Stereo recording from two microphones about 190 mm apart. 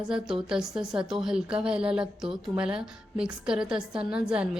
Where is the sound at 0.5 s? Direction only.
5° right (ahead or behind).